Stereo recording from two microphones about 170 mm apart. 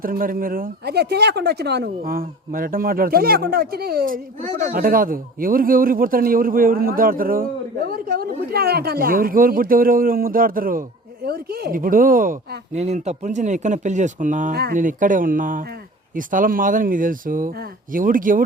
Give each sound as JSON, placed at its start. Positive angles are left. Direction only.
{"t": 0.0, "sound": "speech", "side_deg": -55}
{"t": 11.3, "sound": "speech", "side_deg": -65}